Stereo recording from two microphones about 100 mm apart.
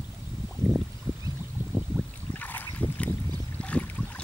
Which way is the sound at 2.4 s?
15° left (ahead or behind).